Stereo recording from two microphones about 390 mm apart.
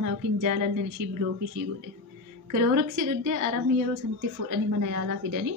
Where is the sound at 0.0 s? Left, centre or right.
Right.